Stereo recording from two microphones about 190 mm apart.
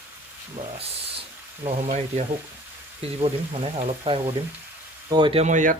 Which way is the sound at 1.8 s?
35° right (ahead or behind).